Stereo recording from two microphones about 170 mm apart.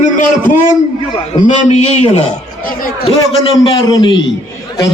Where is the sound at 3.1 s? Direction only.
30° left (ahead or behind).